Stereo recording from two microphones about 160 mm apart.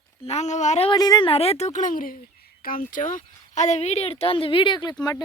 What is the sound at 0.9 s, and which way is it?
Speech, 25° left (ahead or behind).